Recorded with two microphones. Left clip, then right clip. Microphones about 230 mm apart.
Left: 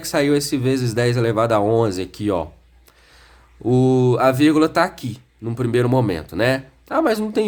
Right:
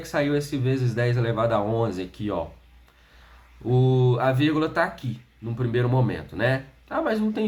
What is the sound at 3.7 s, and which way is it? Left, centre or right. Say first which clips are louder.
Speech: left 7 dB; left.